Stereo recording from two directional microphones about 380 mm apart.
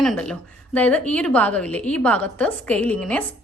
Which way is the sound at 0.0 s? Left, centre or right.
Centre.